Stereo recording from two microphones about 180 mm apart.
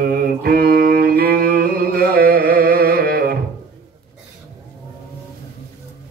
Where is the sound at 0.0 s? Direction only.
55° right (ahead or behind).